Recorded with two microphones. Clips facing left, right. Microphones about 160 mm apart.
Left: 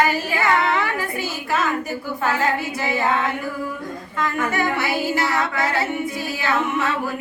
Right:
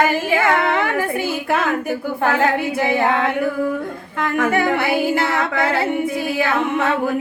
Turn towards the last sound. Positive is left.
turn(degrees=-55)  # may be behind; listen again after turning